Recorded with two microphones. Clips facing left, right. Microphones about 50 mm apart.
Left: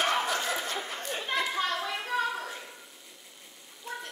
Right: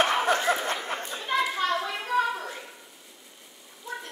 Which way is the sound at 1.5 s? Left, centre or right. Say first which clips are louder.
Right 3 dB; centre.